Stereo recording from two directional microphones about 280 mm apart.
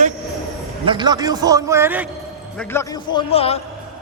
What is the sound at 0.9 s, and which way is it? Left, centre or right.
A man's voice, centre.